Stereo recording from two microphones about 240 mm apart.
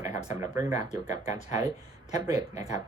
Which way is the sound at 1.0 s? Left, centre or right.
Left.